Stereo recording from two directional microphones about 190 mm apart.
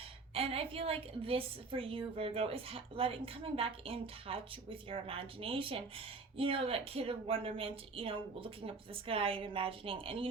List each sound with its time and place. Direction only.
0.3 s a woman's voice: 30° right (ahead or behind)